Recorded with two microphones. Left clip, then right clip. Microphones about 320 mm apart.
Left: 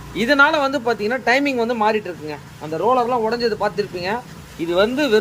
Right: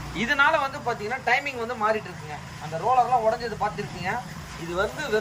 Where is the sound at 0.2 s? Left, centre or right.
Left.